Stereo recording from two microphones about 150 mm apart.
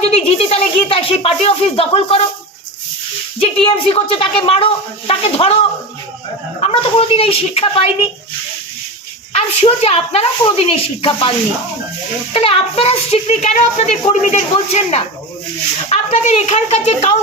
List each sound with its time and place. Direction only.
0.0 s speech: 45° left (ahead or behind)
3.4 s speech: 40° left (ahead or behind)
6.6 s speech: 40° left (ahead or behind)
9.3 s a child's voice: 40° left (ahead or behind)